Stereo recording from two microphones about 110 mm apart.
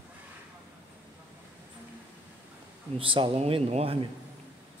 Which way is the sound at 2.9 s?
50° right (ahead or behind).